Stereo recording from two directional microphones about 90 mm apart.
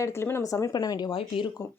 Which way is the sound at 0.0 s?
30° left (ahead or behind).